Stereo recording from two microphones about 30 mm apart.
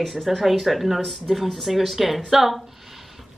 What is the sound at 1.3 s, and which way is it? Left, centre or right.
A woman's voice, centre.